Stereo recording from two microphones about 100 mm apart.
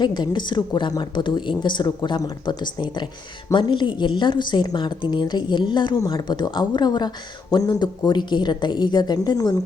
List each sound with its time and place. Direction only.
0.0 s a woman's voice: 50° left (ahead or behind)